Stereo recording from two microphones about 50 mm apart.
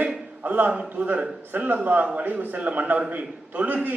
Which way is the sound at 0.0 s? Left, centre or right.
Right.